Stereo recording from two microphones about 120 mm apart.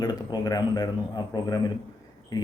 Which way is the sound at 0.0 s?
35° left (ahead or behind).